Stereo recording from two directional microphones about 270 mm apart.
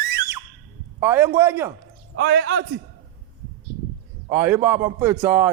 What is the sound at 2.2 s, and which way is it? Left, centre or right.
Speech, right.